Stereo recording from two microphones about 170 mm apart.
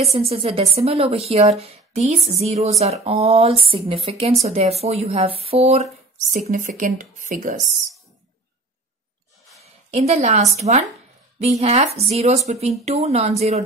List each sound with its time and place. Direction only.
0.0 s speech: 35° right (ahead or behind)
6.3 s speech: 50° right (ahead or behind)
9.8 s speech: 40° right (ahead or behind)